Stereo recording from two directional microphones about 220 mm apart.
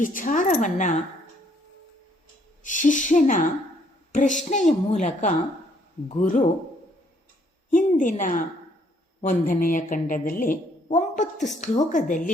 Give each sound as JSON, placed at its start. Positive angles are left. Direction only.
{"t": 0.0, "sound": "speech", "side_deg": 35}
{"t": 2.6, "sound": "speech", "side_deg": 35}
{"t": 7.7, "sound": "speech", "side_deg": 35}